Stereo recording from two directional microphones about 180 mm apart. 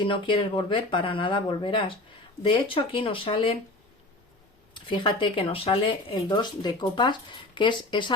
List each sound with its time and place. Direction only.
0.0 s speech: 30° left (ahead or behind)
4.7 s speech: 25° left (ahead or behind)